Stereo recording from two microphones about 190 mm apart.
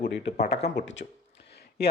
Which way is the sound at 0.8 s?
70° left (ahead or behind).